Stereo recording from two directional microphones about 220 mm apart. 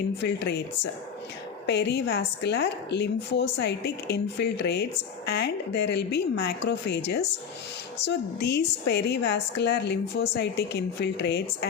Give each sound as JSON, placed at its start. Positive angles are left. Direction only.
{"t": 0.2, "sound": "a woman's voice", "side_deg": 50}
{"t": 1.6, "sound": "a woman's voice", "side_deg": 50}
{"t": 8.0, "sound": "a woman's voice", "side_deg": 50}